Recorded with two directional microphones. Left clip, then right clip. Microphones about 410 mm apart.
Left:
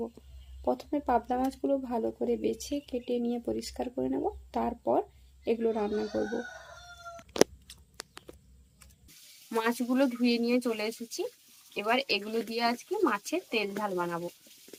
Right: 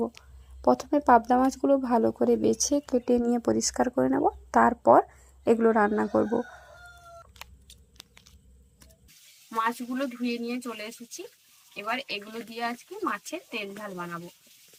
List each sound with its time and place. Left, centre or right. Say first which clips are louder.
0.6 s speech: right 8 dB; centre
2.9 s speech: right 5 dB; right
3.3 s speech: right 8 dB; centre
9.5 s speech: right 1 dB; centre